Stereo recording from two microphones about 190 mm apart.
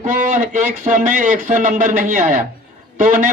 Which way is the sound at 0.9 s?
40° right (ahead or behind).